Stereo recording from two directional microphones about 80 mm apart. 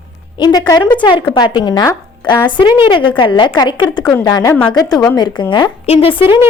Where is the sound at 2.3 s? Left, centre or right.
Left.